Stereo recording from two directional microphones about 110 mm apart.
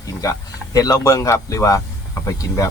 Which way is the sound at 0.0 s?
30° left (ahead or behind).